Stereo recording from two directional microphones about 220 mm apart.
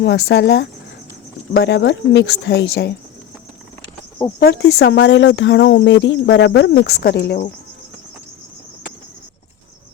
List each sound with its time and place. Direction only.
0.0 s speech: 55° left (ahead or behind)
4.4 s speech: 50° left (ahead or behind)